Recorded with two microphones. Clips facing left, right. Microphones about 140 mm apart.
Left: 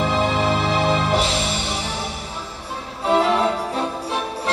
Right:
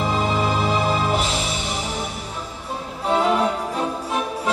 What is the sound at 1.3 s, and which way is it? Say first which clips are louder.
Music: left 2 dB; centre (ahead or behind).